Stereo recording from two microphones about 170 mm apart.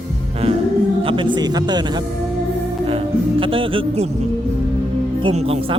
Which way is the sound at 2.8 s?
30° right (ahead or behind).